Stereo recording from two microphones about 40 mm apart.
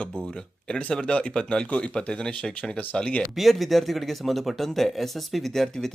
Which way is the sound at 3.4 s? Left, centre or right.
Centre.